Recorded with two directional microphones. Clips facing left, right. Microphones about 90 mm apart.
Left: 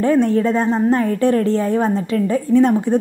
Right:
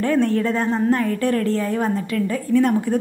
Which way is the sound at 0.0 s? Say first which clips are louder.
Left 4 dB; 20° left (ahead or behind).